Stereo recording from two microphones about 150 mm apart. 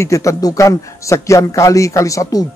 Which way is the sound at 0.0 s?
20° left (ahead or behind).